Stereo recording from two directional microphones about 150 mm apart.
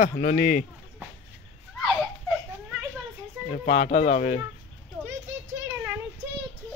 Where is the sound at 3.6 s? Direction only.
65° left (ahead or behind).